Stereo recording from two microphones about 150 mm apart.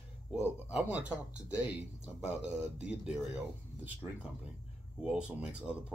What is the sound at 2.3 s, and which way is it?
Speech, 5° right (ahead or behind).